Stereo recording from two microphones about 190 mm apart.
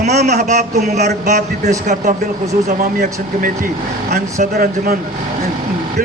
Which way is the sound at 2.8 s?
45° right (ahead or behind).